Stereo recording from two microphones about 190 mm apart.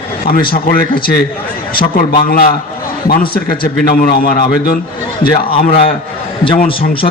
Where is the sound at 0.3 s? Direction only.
50° left (ahead or behind).